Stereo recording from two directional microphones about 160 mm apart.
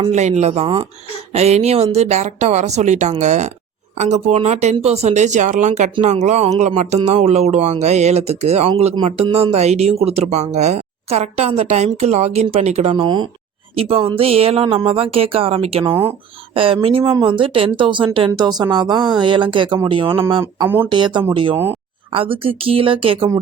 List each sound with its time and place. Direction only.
0.1 s speech: 45° right (ahead or behind)
13.0 s speech: 30° right (ahead or behind)
20.4 s speech: 15° right (ahead or behind)
20.9 s speech: 30° right (ahead or behind)